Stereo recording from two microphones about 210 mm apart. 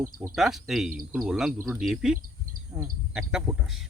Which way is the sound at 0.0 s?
5° right (ahead or behind).